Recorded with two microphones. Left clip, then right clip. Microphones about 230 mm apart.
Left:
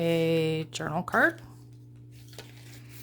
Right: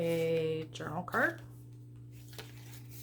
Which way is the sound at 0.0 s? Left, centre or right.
Left.